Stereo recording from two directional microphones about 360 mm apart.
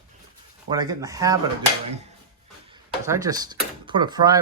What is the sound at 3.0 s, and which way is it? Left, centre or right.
Speech, centre.